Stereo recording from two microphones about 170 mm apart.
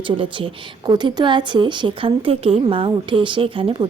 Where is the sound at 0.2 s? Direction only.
30° right (ahead or behind).